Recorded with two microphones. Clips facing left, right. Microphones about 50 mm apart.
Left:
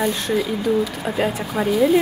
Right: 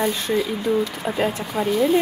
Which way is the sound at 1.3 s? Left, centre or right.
Centre.